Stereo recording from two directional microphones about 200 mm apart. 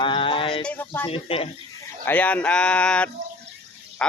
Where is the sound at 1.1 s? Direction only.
30° left (ahead or behind).